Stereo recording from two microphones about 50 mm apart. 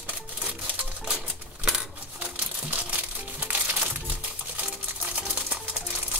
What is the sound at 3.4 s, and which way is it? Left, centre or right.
Music, right.